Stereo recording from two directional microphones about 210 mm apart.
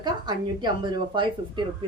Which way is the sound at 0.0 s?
20° right (ahead or behind).